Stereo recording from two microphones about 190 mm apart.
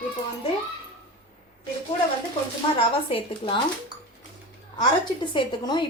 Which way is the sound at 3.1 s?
25° left (ahead or behind).